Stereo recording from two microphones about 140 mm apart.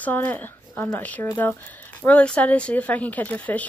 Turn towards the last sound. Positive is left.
turn(degrees=10)  # may be behind; listen again after turning